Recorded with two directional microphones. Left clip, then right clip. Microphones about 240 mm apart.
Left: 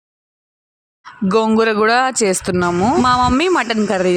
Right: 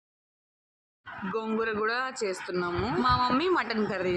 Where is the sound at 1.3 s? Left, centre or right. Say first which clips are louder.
Left 16 dB; left.